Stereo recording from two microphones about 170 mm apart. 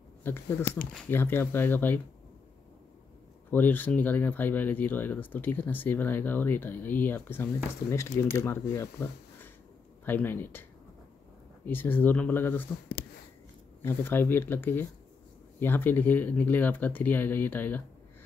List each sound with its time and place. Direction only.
0.2 s speech: 15° left (ahead or behind)
3.4 s speech: 10° left (ahead or behind)
10.0 s speech: 10° left (ahead or behind)
11.6 s speech: 10° left (ahead or behind)
13.8 s speech: 10° left (ahead or behind)